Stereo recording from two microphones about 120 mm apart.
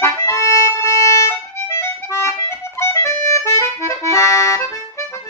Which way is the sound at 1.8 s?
20° left (ahead or behind).